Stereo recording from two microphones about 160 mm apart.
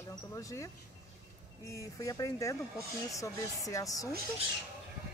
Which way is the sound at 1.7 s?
20° left (ahead or behind).